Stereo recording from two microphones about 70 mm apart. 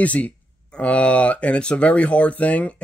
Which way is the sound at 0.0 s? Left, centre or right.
Centre.